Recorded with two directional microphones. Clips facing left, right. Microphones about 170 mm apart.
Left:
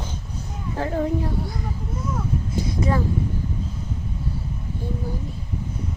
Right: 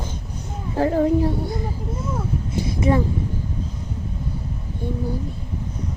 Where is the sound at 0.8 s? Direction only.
30° right (ahead or behind).